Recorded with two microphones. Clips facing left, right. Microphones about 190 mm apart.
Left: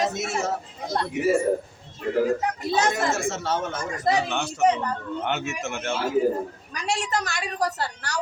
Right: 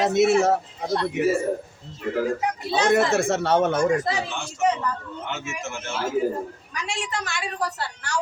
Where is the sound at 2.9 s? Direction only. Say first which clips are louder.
Right 6 dB; 65° right (ahead or behind).